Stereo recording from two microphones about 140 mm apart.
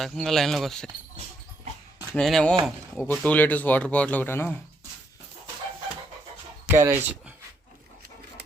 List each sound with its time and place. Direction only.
0.0 s speech: centre (ahead or behind)
2.1 s speech: 5° left (ahead or behind)
3.0 s speech: 15° left (ahead or behind)
6.7 s speech: 15° right (ahead or behind)